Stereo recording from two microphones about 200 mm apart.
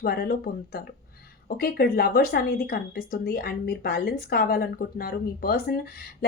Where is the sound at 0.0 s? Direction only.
50° left (ahead or behind).